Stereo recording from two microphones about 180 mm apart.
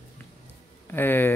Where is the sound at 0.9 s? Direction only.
10° left (ahead or behind).